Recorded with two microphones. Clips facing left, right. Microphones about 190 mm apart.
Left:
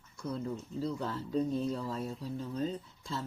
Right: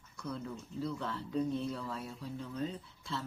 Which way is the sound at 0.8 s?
35° left (ahead or behind).